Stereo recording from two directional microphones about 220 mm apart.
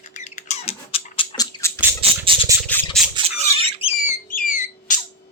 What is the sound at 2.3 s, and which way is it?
Squawk, 20° right (ahead or behind).